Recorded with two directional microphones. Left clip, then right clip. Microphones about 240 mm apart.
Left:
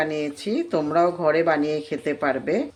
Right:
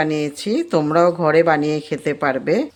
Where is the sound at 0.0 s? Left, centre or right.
Right.